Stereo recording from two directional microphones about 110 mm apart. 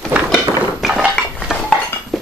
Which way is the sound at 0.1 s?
10° right (ahead or behind).